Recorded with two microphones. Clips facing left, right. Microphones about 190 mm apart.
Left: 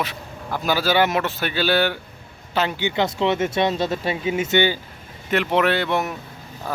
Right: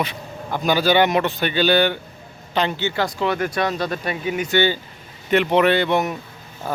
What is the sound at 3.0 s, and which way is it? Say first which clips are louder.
Speech: left 2 dB; 25° left (ahead or behind).